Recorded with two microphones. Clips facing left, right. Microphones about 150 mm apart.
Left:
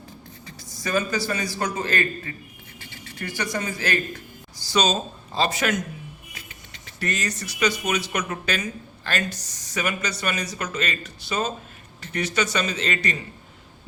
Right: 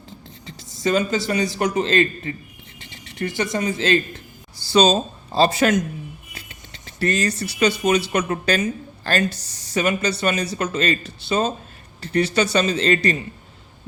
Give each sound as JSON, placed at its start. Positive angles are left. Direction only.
{"t": 0.4, "sound": "a man's voice", "side_deg": -25}